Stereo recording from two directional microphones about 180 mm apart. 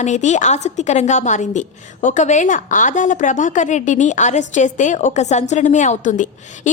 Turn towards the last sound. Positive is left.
turn(degrees=45)  # may be behind; listen again after turning